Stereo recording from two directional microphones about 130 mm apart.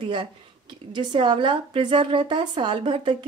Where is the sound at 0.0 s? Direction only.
40° right (ahead or behind).